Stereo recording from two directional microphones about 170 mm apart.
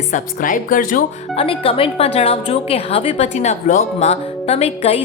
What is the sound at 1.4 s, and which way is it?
A woman's voice, 35° left (ahead or behind).